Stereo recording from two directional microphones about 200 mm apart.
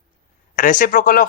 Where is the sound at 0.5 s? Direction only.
40° left (ahead or behind).